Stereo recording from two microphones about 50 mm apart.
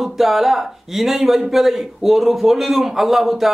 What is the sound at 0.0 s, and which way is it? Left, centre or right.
A man's voice, centre.